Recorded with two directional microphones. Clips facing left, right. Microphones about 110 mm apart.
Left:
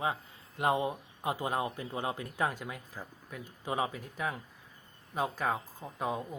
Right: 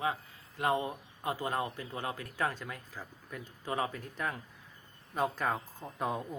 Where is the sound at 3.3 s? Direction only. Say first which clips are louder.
Left 1 dB; 5° left (ahead or behind).